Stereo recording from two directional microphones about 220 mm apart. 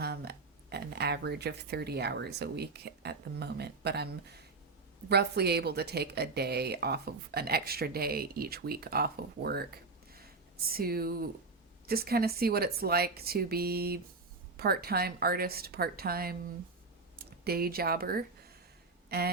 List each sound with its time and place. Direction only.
0.0 s speech: 45° right (ahead or behind)
10.7 s speech: 45° right (ahead or behind)
17.4 s speech: 45° right (ahead or behind)
19.0 s a sound: 45° right (ahead or behind)